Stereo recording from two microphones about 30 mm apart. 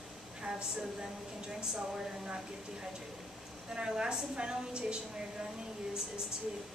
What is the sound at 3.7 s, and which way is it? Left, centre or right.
A woman's voice, right.